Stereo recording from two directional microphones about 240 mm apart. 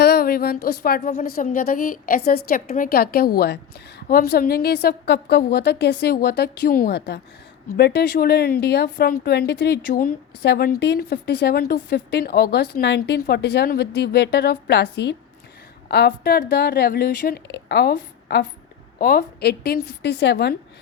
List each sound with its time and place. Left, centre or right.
0.0 s a woman's voice: left